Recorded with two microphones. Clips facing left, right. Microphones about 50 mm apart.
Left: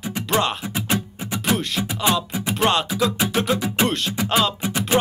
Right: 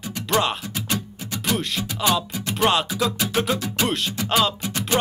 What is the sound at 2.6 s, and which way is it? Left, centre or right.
Speech, centre.